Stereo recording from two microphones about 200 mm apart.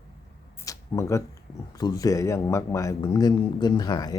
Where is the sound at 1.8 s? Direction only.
20° left (ahead or behind).